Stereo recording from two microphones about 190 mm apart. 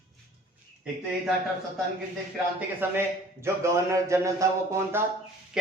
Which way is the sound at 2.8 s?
10° right (ahead or behind).